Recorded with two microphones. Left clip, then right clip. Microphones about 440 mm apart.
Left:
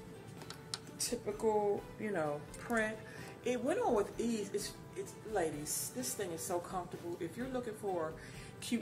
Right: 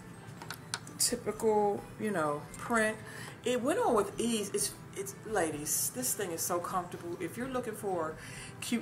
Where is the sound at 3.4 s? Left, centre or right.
Left.